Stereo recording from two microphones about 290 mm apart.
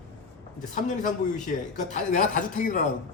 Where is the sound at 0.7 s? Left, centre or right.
Left.